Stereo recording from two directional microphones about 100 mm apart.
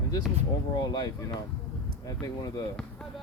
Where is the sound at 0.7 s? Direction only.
40° left (ahead or behind).